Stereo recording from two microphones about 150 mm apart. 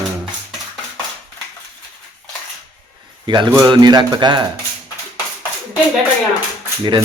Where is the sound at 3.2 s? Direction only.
30° right (ahead or behind).